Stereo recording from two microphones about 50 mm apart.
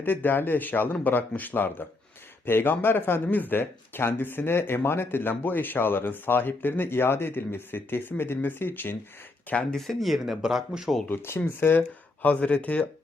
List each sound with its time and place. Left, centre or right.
0.0 s a man's voice: left
9.7 s speech: centre
11.1 s speech: left
12.2 s a man's voice: left